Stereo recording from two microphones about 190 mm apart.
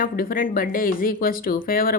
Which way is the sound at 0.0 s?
50° left (ahead or behind).